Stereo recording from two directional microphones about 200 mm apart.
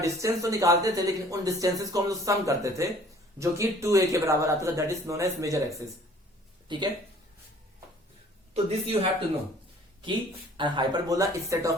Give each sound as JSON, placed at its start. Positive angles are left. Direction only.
{"t": 0.0, "sound": "speech", "side_deg": -15}
{"t": 8.5, "sound": "speech", "side_deg": -30}
{"t": 10.6, "sound": "speech", "side_deg": -20}